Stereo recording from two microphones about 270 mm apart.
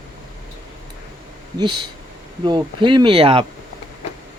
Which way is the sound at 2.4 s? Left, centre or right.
Centre.